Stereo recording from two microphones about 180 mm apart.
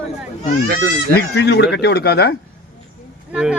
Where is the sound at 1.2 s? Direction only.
70° left (ahead or behind).